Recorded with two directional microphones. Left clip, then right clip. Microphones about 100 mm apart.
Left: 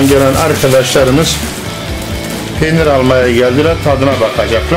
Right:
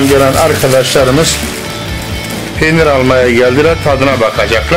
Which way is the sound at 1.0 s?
45° right (ahead or behind).